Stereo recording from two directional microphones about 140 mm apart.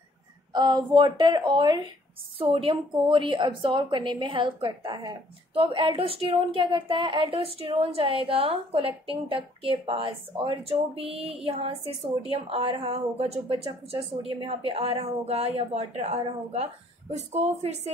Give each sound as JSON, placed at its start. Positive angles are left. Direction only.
{"t": 0.5, "sound": "a woman's voice", "side_deg": -30}